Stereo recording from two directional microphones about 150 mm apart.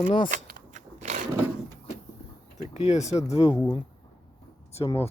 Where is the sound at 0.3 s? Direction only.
65° right (ahead or behind).